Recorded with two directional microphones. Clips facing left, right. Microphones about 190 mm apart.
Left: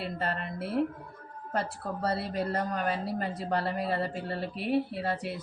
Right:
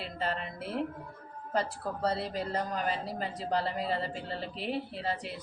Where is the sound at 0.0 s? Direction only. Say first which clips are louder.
Left 2 dB; 60° left (ahead or behind).